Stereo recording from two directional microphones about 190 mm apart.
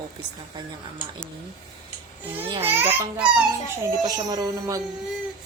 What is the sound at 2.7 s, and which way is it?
A woman's voice, 10° right (ahead or behind).